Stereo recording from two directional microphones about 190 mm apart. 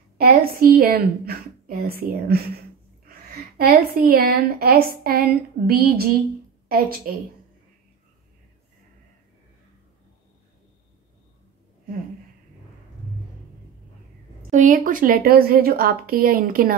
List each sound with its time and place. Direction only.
0.2 s a woman's voice: 50° right (ahead or behind)
14.5 s a woman's voice: 45° right (ahead or behind)